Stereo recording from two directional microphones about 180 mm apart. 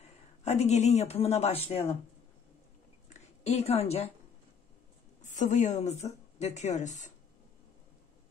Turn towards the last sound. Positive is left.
turn(degrees=40)  # may be behind; listen again after turning